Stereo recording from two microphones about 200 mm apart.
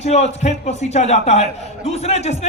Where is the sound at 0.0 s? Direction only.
35° left (ahead or behind).